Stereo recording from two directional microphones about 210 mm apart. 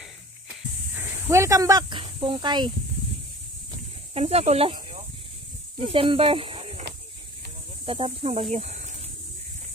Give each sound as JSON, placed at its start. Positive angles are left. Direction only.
{"t": 0.0, "sound": "snake", "side_deg": -10}
{"t": 4.1, "sound": "speech", "side_deg": -30}
{"t": 5.9, "sound": "speech", "side_deg": -25}
{"t": 7.8, "sound": "speech", "side_deg": -25}